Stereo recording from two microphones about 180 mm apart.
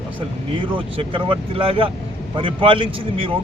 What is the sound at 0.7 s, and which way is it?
Speech, 30° right (ahead or behind).